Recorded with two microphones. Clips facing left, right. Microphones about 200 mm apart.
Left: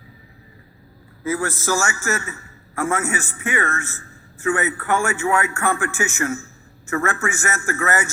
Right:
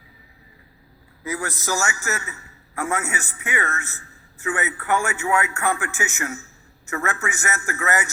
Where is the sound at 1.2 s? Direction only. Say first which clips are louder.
Left 5 dB; 15° right (ahead or behind).